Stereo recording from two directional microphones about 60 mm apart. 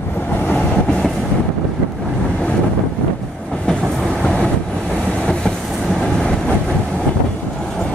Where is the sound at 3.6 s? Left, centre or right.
Centre.